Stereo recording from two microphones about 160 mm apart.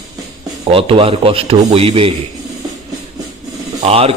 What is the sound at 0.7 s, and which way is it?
A man's voice, 35° right (ahead or behind).